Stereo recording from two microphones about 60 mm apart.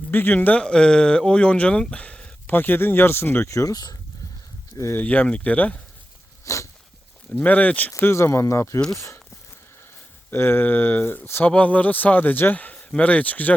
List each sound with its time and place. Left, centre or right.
0.1 s speech: left
0.6 s speech: centre
2.5 s speech: left
3.5 s speech: left
4.9 s a man's voice: left
6.4 s a sound: left
7.3 s a man's voice: left
8.0 s speech: left
10.3 s speech: left
11.4 s a man's voice: left
12.7 s speech: centre